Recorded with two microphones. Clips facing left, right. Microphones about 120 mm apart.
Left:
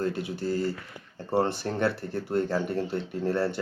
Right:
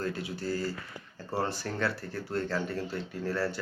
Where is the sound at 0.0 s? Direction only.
20° left (ahead or behind).